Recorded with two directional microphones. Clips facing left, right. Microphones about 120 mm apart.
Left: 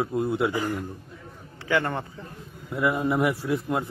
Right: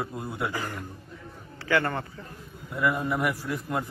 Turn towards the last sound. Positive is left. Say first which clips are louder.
# left 4 dB
turn(degrees=20)  # may be behind; listen again after turning